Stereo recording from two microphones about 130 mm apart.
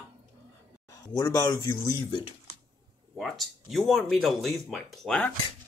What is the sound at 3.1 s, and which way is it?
Speech, centre (ahead or behind).